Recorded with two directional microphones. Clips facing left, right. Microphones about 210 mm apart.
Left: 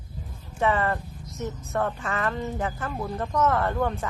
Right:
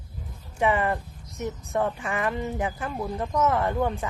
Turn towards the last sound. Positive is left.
turn(degrees=-15)  # may be behind; listen again after turning